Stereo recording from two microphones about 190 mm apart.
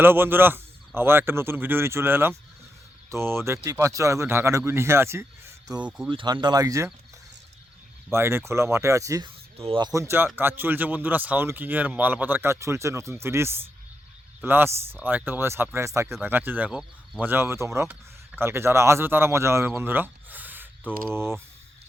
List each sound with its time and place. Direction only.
0.0 s speech: 10° right (ahead or behind)
6.1 s speech: 25° right (ahead or behind)
8.1 s speech: 15° right (ahead or behind)